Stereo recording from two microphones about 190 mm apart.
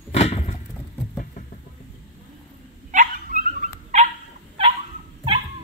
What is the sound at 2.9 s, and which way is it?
Dog, 45° right (ahead or behind).